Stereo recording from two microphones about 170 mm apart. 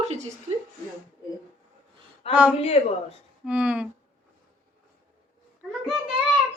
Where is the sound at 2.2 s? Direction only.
35° left (ahead or behind).